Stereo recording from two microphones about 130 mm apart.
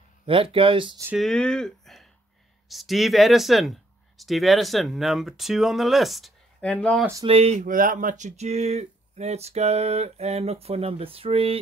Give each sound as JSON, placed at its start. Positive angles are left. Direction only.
{"t": 0.3, "sound": "speech", "side_deg": -45}
{"t": 1.1, "sound": "speech", "side_deg": 5}
{"t": 7.2, "sound": "speech", "side_deg": -50}
{"t": 7.6, "sound": "speech", "side_deg": -90}